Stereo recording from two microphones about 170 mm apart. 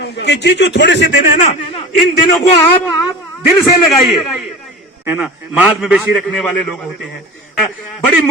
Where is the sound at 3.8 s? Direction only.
Centre (ahead or behind).